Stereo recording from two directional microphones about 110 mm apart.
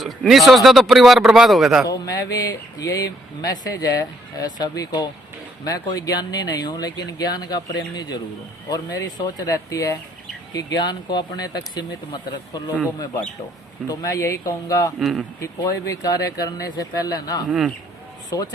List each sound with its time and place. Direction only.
0.0 s speech: centre (ahead or behind)
1.9 s speech: 30° left (ahead or behind)
13.8 s speech: 30° left (ahead or behind)
14.9 s speech: centre (ahead or behind)
15.4 s speech: 30° left (ahead or behind)